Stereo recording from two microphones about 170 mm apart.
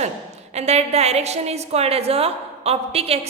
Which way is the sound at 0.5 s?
40° right (ahead or behind).